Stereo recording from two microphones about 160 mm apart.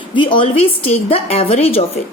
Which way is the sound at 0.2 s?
30° left (ahead or behind).